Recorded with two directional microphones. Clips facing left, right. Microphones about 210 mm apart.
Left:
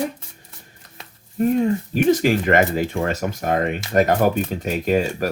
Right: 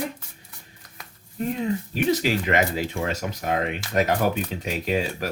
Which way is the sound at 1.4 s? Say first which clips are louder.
Left 7 dB; 50° left (ahead or behind).